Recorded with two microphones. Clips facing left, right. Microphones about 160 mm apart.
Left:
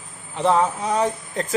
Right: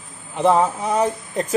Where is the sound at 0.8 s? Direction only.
10° right (ahead or behind).